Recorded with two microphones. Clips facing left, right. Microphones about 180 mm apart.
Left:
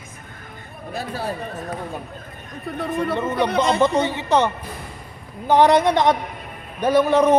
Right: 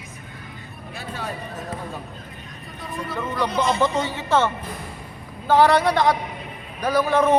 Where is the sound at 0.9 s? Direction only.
40° left (ahead or behind).